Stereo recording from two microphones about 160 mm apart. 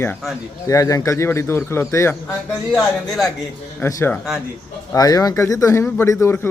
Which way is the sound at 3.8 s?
15° left (ahead or behind).